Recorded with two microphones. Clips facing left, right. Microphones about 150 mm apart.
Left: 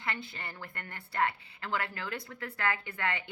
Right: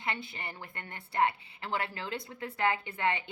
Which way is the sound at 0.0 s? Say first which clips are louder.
Right 2 dB; 20° right (ahead or behind).